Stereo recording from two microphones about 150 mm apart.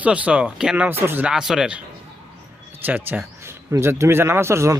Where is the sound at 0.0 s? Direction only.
10° right (ahead or behind).